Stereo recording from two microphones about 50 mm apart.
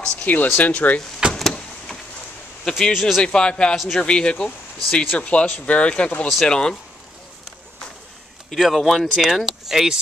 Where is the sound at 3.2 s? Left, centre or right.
Centre.